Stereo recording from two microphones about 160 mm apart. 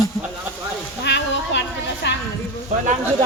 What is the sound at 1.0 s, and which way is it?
Speech, 90° left.